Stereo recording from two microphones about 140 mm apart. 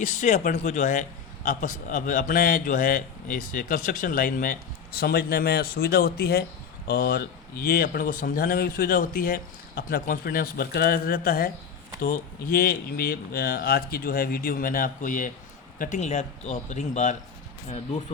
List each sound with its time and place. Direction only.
0.0 s speech: 60° left (ahead or behind)
1.5 s a man's voice: 75° left (ahead or behind)
15.8 s speech: 55° left (ahead or behind)